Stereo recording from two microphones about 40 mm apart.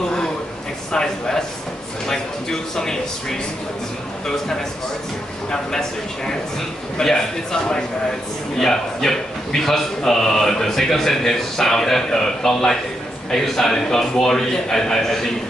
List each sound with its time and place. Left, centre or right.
0.9 s a man's voice: centre
2.7 s a man's voice: centre
5.5 s a man's voice: centre
8.5 s a man's voice: centre